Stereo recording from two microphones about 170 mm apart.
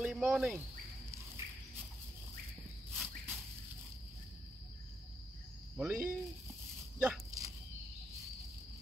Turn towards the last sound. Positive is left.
turn(degrees=-20)  # may be behind; listen again after turning